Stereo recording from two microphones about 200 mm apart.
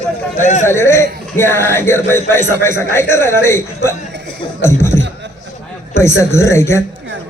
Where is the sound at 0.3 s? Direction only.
35° left (ahead or behind).